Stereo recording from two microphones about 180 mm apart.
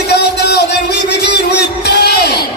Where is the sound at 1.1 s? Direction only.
70° left (ahead or behind).